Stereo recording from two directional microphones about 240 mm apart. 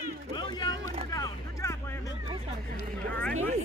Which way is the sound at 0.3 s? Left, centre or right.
Centre.